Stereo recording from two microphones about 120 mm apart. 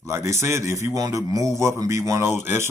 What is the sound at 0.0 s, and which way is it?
A man's voice, 25° right (ahead or behind).